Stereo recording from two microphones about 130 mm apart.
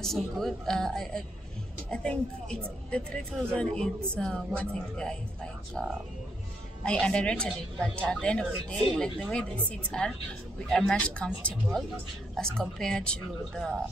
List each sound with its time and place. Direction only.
0.0 s a woman's voice: 5° left (ahead or behind)